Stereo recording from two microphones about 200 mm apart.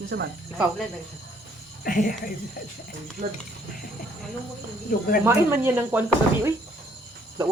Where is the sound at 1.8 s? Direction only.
45° left (ahead or behind).